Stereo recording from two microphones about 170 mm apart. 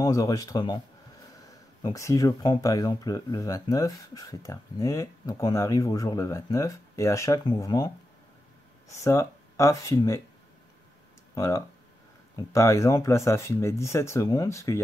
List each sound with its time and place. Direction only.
0.0 s speech: 20° left (ahead or behind)
1.8 s speech: 20° left (ahead or behind)
11.3 s speech: 20° left (ahead or behind)